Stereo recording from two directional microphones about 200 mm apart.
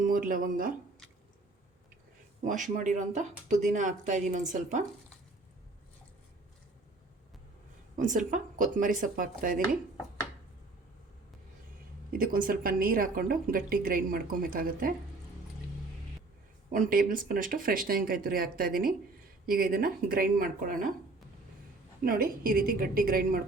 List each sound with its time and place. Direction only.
0.1 s speech: 45° right (ahead or behind)
2.4 s speech: 40° right (ahead or behind)
7.9 s a woman's voice: 40° right (ahead or behind)
12.1 s speech: 45° right (ahead or behind)
16.7 s speech: 40° right (ahead or behind)
22.0 s speech: 50° right (ahead or behind)